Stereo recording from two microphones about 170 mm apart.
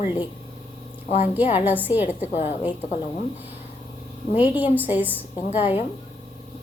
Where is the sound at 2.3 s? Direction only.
40° left (ahead or behind).